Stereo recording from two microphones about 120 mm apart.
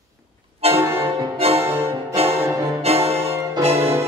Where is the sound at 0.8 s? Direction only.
20° right (ahead or behind).